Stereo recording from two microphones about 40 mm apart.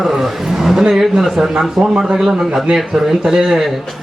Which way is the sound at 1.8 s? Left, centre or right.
Right.